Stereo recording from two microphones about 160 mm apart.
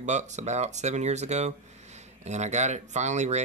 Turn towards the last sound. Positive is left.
turn(degrees=-45)  # may be behind; listen again after turning